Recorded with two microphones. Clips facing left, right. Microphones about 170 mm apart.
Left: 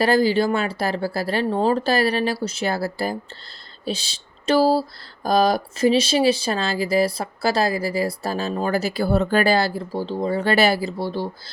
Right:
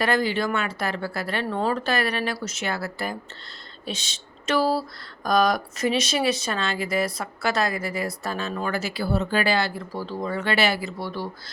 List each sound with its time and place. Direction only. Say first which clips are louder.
0.0 s speech: left 6 dB; 30° left (ahead or behind)